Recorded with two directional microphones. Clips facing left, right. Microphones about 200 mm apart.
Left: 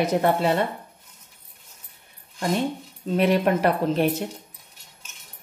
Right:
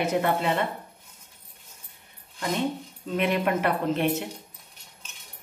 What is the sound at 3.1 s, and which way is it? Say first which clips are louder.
A woman's voice: left 4 dB; 35° left (ahead or behind).